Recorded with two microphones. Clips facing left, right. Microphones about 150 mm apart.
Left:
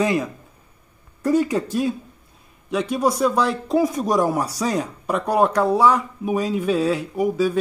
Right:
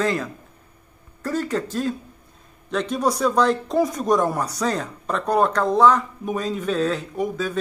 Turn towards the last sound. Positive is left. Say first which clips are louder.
# left 5 dB
turn(degrees=10)  # may be behind; listen again after turning